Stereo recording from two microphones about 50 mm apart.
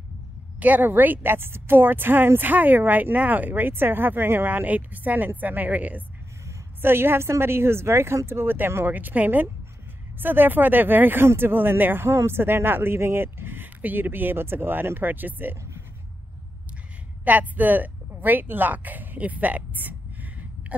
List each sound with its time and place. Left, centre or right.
0.6 s speech: right
4.6 s a woman's voice: right
6.8 s speech: right
8.3 s speech: right
8.8 s a woman's voice: right
17.2 s speech: right